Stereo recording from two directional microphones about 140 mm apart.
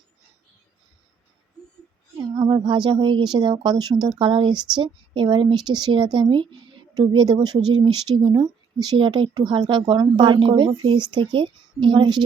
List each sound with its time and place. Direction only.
2.3 s speech: 35° right (ahead or behind)
3.9 s speech: centre (ahead or behind)
4.2 s speech: 35° right (ahead or behind)